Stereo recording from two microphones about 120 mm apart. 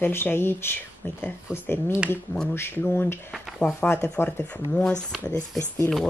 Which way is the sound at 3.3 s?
Centre (ahead or behind).